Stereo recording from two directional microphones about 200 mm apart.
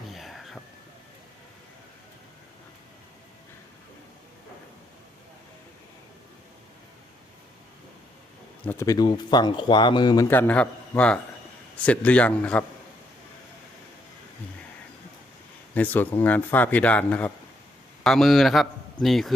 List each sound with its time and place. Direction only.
0.1 s whispering: centre (ahead or behind)
8.6 s a man's voice: 15° left (ahead or behind)
15.7 s a man's voice: 10° left (ahead or behind)